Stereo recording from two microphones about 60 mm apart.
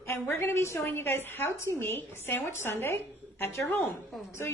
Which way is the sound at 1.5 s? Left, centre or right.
Left.